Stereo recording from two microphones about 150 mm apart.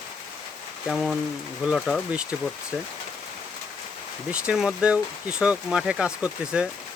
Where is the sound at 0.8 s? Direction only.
Centre (ahead or behind).